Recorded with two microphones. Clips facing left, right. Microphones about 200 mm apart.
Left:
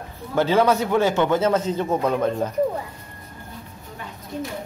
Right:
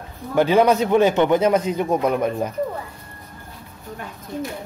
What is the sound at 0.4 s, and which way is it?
Speech, 15° right (ahead or behind).